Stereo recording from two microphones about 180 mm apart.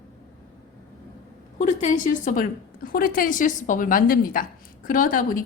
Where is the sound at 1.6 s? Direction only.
45° left (ahead or behind).